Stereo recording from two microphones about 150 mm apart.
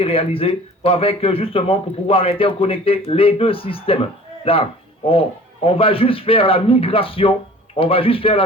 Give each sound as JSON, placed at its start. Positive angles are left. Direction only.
{"t": 0.0, "sound": "a man's voice", "side_deg": 40}